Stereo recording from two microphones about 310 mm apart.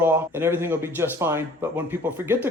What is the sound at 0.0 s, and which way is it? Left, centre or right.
Speech, centre.